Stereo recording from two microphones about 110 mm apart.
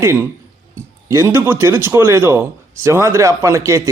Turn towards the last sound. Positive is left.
turn(degrees=-30)  # may be behind; listen again after turning